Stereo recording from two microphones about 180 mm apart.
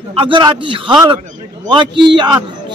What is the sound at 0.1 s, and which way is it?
A man's voice, 30° right (ahead or behind).